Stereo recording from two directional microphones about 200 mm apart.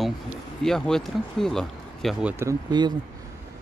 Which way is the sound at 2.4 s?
20° right (ahead or behind).